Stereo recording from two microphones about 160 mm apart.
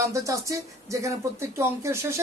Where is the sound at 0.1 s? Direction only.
20° right (ahead or behind).